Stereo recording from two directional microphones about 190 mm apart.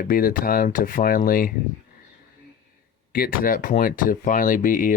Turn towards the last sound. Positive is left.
turn(degrees=45)  # may be behind; listen again after turning